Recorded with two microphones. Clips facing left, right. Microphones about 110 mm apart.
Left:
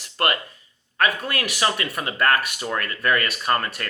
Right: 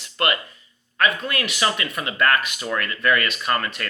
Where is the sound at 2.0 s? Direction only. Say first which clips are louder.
Even; 35° left (ahead or behind).